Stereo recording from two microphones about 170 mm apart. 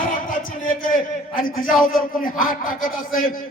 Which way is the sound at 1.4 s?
55° left (ahead or behind).